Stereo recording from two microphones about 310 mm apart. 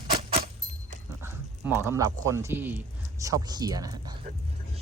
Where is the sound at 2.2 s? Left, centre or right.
Centre.